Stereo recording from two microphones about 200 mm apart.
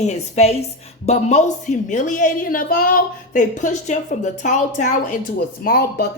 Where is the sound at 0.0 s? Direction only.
35° left (ahead or behind).